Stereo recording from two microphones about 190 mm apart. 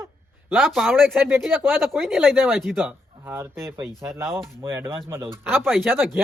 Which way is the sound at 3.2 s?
15° right (ahead or behind).